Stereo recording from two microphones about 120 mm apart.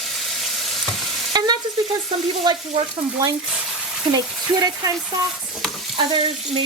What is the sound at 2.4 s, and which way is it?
Frying, 45° right (ahead or behind).